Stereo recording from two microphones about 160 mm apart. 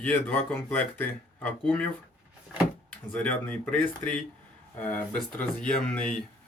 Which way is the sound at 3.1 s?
10° left (ahead or behind).